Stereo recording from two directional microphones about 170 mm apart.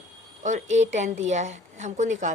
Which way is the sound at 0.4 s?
45° right (ahead or behind).